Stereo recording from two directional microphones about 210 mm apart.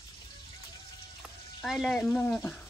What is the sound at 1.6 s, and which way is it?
Speech, centre (ahead or behind).